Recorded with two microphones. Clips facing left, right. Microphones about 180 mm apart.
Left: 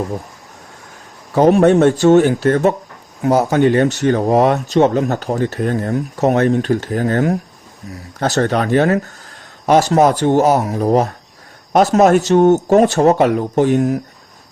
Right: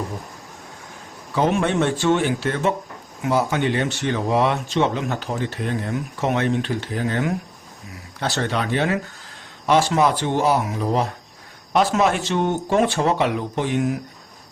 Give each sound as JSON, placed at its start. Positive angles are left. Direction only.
{"t": 1.4, "sound": "speech", "side_deg": 40}